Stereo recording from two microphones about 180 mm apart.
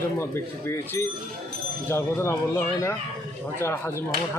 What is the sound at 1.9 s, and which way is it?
Speech, 15° left (ahead or behind).